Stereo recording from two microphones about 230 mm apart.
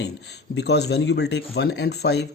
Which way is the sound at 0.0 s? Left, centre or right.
Left.